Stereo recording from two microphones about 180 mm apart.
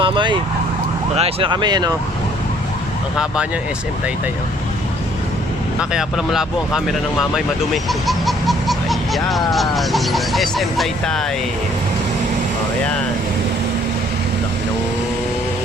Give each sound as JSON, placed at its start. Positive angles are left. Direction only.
{"t": 0.0, "sound": "vehicle", "side_deg": -25}
{"t": 1.1, "sound": "speech", "side_deg": -30}
{"t": 5.9, "sound": "speech", "side_deg": -5}